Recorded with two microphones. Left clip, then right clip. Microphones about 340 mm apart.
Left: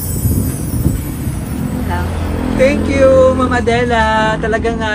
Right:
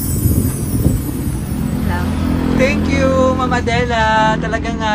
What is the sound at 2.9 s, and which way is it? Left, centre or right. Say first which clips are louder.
Speech: left 6 dB; centre.